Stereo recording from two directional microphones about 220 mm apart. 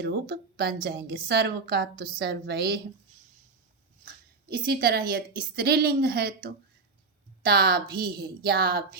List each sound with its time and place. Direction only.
0.0 s a woman's voice: 45° right (ahead or behind)
4.4 s a woman's voice: 45° right (ahead or behind)
7.4 s a woman's voice: 45° right (ahead or behind)